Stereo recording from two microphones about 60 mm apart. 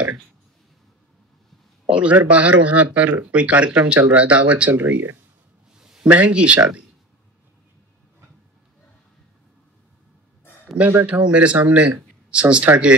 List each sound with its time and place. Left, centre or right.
1.9 s speech: right
4.7 s speech: right
5.8 s a sound: centre
6.0 s speech: right
11.1 s speech: centre